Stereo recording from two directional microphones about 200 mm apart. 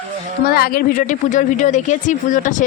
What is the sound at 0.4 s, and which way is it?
Speech, 50° left (ahead or behind).